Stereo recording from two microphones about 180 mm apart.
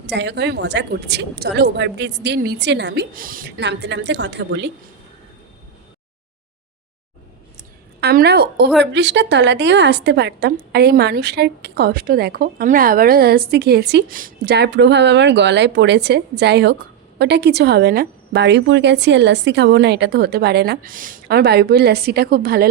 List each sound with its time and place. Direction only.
0.1 s a woman's voice: 75° right (ahead or behind); by 3.5 s 50° right (ahead or behind)
3.6 s a woman's voice: 75° right (ahead or behind)
8.0 s a woman's voice: 65° right (ahead or behind)